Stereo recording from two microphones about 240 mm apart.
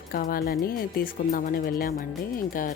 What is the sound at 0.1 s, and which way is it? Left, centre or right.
Speech, left.